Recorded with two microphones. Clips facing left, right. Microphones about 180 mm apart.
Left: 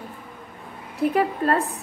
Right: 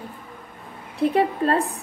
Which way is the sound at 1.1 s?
30° right (ahead or behind).